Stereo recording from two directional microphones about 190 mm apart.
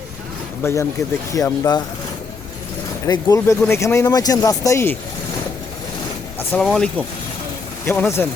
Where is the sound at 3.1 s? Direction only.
20° left (ahead or behind).